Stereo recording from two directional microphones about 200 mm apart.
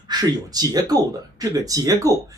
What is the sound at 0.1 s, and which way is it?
Speech, 20° right (ahead or behind).